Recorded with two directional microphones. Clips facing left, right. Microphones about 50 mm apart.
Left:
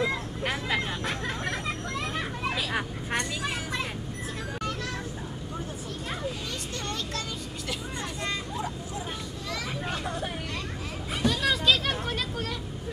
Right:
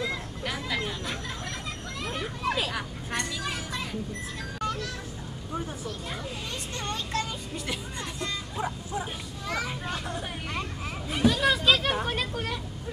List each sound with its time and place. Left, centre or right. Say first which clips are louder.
0.0 s vehicle: left 3 dB; left
2.7 s vehicle: left 3 dB; left
8.5 s bow-wow: right 2 dB; centre
11.2 s children playing: right 2 dB; centre